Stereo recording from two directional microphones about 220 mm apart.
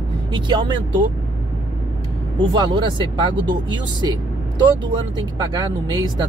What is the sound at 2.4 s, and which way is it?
Speech, 20° right (ahead or behind).